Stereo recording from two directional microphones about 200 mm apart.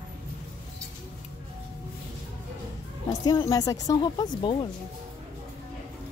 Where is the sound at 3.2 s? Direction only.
20° left (ahead or behind).